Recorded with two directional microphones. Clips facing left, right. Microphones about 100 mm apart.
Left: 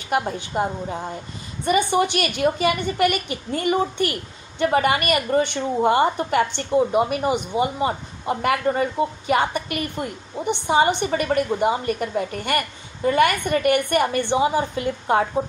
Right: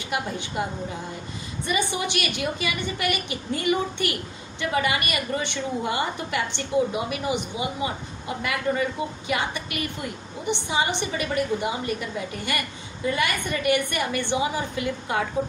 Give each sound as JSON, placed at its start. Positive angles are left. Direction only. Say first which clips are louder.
{"t": 0.1, "sound": "a woman's voice", "louder": "left 6 dB", "side_deg": 40}